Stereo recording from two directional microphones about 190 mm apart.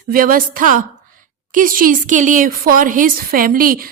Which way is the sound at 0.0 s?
50° right (ahead or behind).